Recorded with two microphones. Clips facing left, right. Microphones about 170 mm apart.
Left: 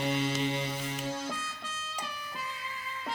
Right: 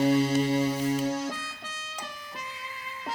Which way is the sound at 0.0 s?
40° right (ahead or behind).